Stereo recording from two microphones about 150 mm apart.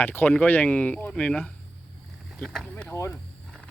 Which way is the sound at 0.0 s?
10° left (ahead or behind).